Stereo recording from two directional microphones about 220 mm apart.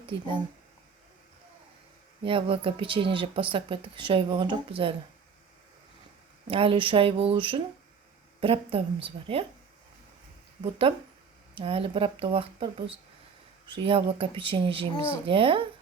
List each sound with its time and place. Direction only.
0.0 s speech: 25° right (ahead or behind)
2.2 s speech: 25° right (ahead or behind)
6.5 s speech: 25° right (ahead or behind)
10.6 s speech: 25° right (ahead or behind)
13.7 s speech: 25° right (ahead or behind)